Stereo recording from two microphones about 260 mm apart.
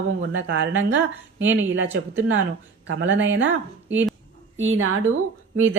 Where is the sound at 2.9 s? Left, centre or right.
Right.